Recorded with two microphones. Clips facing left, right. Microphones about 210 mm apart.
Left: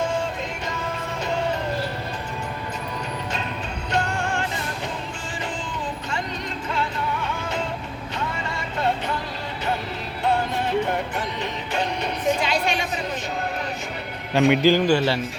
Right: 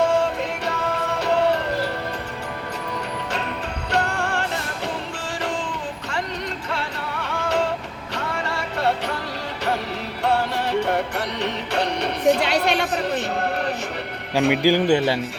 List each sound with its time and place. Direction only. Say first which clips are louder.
0.0 s music: right 5 dB; 65° right (ahead or behind)
3.9 s music: right 1 dB; 65° right (ahead or behind)
6.7 s music: left 2 dB; 75° right (ahead or behind)
10.2 s music: right 1 dB; 75° right (ahead or behind)
14.3 s a man's voice: left 1 dB; 5° right (ahead or behind)